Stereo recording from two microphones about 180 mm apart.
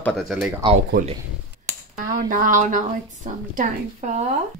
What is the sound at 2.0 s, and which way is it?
Speech, 50° right (ahead or behind).